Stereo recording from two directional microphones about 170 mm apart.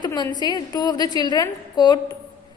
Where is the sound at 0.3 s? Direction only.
25° left (ahead or behind).